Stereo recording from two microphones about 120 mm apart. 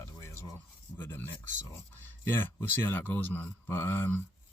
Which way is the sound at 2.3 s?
15° left (ahead or behind).